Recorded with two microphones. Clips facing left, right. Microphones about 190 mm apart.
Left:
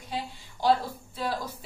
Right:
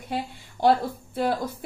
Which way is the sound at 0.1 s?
55° right (ahead or behind).